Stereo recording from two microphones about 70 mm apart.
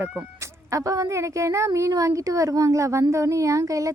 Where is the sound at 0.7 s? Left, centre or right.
Right.